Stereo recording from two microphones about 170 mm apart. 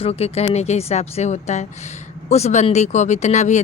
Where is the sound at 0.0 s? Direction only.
35° left (ahead or behind).